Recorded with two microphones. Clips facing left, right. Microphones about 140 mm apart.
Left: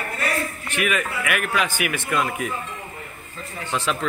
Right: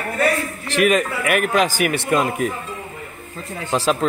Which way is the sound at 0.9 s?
40° right (ahead or behind).